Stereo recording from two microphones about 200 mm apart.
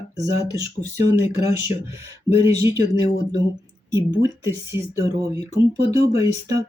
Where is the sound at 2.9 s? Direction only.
80° left.